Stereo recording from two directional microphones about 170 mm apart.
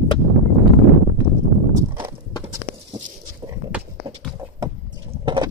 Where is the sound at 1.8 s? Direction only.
20° right (ahead or behind).